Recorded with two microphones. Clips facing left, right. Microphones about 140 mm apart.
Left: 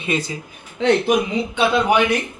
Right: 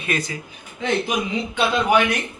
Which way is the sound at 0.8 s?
75° left (ahead or behind).